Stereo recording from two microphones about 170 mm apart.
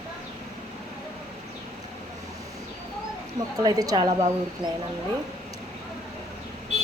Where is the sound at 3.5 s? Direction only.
20° right (ahead or behind).